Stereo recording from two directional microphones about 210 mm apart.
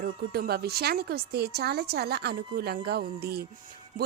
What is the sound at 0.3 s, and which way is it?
Speech, 50° right (ahead or behind).